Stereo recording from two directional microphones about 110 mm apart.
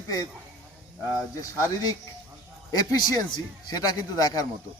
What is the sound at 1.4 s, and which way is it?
A man's voice, 30° left (ahead or behind).